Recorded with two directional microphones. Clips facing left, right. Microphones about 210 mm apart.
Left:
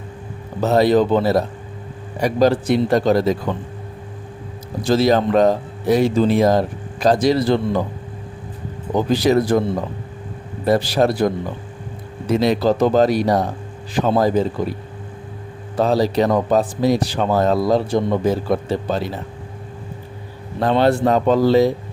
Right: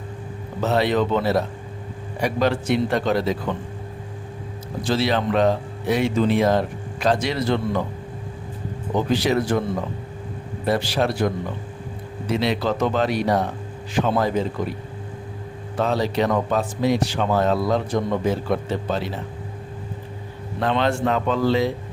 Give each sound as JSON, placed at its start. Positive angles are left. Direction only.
{"t": 0.6, "sound": "speech", "side_deg": 40}
{"t": 4.8, "sound": "speech", "side_deg": 40}
{"t": 9.0, "sound": "speech", "side_deg": 40}
{"t": 10.7, "sound": "speech", "side_deg": 40}
{"t": 12.3, "sound": "speech", "side_deg": 45}
{"t": 15.8, "sound": "speech", "side_deg": 35}
{"t": 20.6, "sound": "speech", "side_deg": 40}